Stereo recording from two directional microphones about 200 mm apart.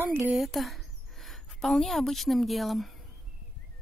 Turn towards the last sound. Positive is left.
turn(degrees=0)  # may be behind; listen again after turning